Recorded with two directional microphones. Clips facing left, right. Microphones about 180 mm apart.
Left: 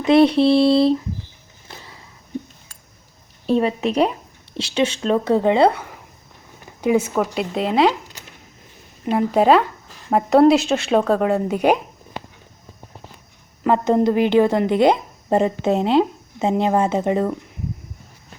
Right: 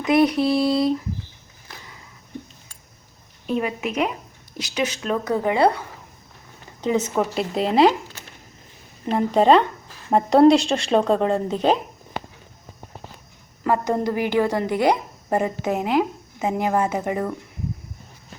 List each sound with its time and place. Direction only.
0.0 s a woman's voice: 30° left (ahead or behind)
1.6 s a sound: 30° left (ahead or behind)
3.4 s a woman's voice: 30° left (ahead or behind)
6.8 s speech: 10° left (ahead or behind)
7.3 s speech: centre (ahead or behind)
9.0 s speech: 5° left (ahead or behind)
13.7 s a woman's voice: 20° left (ahead or behind)